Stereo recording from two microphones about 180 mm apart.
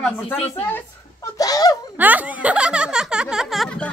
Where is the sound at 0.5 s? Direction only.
10° left (ahead or behind).